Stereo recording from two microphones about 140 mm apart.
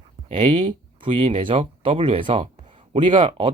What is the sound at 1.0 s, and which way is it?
Speech, 40° right (ahead or behind).